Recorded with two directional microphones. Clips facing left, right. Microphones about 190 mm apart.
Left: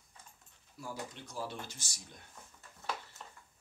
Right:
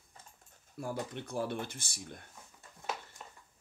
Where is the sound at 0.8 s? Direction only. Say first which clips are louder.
Right 6 dB; 55° right (ahead or behind).